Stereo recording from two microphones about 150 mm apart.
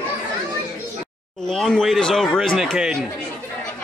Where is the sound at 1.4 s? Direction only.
5° left (ahead or behind).